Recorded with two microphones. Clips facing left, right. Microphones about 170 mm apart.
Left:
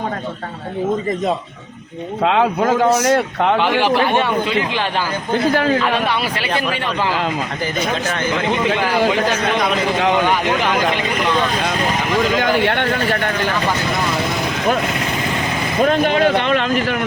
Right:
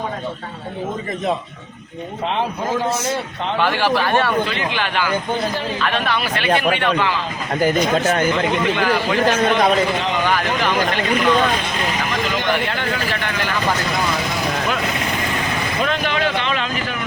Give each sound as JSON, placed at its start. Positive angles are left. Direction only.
{"t": 2.2, "sound": "a man's voice", "side_deg": 85}
{"t": 3.6, "sound": "a man's voice", "side_deg": 15}
{"t": 4.7, "sound": "a man's voice", "side_deg": 30}
{"t": 5.5, "sound": "speech", "side_deg": 75}
{"t": 6.3, "sound": "speech", "side_deg": -25}
{"t": 10.2, "sound": "a man's voice", "side_deg": 20}
{"t": 12.6, "sound": "speech", "side_deg": 70}
{"t": 15.8, "sound": "a sound", "side_deg": 45}